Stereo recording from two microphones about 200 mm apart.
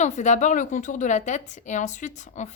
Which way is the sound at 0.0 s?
35° left (ahead or behind).